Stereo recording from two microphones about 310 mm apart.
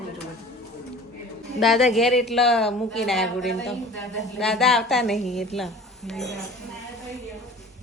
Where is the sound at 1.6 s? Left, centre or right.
Centre.